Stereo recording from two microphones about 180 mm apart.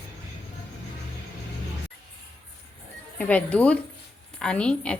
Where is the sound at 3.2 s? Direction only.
5° left (ahead or behind).